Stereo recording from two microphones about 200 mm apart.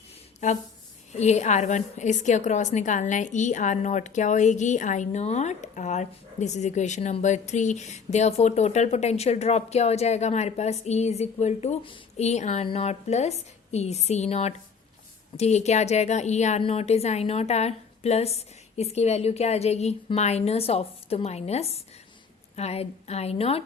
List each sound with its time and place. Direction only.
0.3 s a woman's voice: 35° left (ahead or behind)